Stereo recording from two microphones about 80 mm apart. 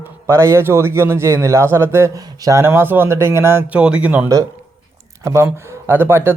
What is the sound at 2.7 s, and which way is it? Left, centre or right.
Speech, right.